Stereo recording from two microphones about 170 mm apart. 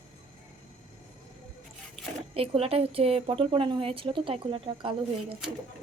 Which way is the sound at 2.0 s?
Centre (ahead or behind).